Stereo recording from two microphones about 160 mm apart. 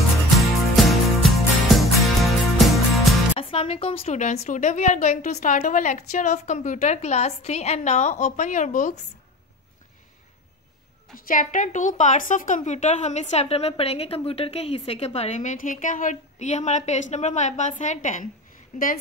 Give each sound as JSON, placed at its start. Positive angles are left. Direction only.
{"t": 0.4, "sound": "music", "side_deg": 0}
{"t": 3.3, "sound": "a woman's voice", "side_deg": 35}
{"t": 11.2, "sound": "a woman's voice", "side_deg": 55}